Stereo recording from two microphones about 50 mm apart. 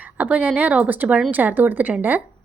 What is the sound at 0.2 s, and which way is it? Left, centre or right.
A woman's voice, right.